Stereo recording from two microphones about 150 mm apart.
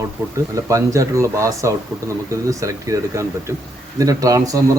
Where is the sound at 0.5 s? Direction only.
20° right (ahead or behind).